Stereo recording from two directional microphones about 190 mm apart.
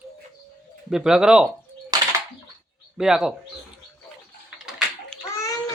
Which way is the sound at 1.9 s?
20° right (ahead or behind).